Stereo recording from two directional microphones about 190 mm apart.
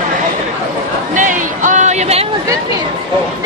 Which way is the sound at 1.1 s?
40° right (ahead or behind).